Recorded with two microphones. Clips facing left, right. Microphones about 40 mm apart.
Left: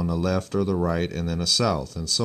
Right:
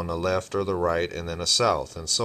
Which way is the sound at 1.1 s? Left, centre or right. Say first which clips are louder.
Left 2 dB; centre.